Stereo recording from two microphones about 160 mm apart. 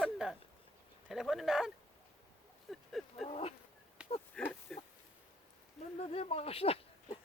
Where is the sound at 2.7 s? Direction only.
Centre (ahead or behind).